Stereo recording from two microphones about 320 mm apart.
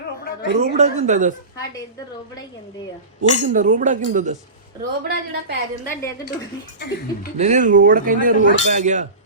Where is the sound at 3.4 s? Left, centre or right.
Right.